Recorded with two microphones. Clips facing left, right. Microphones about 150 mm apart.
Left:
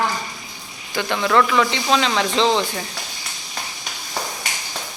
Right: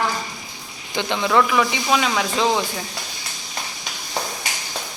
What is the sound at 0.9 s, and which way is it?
Speech, 20° right (ahead or behind).